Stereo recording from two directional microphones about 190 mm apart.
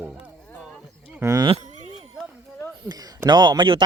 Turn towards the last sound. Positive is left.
turn(degrees=-25)  # may be behind; listen again after turning